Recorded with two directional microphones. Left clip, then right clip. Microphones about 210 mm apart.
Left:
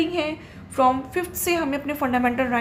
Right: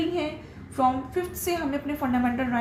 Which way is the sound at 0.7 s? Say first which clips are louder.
Left 4 dB; 45° left (ahead or behind).